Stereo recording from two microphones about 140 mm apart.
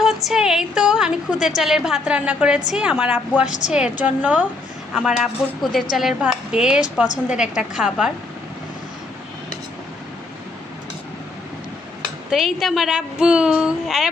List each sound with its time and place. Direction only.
0.0 s a woman's voice: centre (ahead or behind)
12.3 s a woman's voice: centre (ahead or behind)